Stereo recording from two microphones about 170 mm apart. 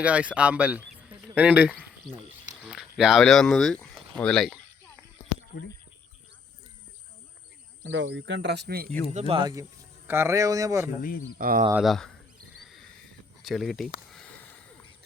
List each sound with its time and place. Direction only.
0.0 s speech: 5° right (ahead or behind)
7.9 s speech: 90° right; by 8.9 s 70° right (ahead or behind)
9.1 s speech: 35° right (ahead or behind)
10.1 s speech: 15° right (ahead or behind)
11.3 s speech: 55° right (ahead or behind)
11.7 s speech: centre (ahead or behind)
13.4 s speech: centre (ahead or behind)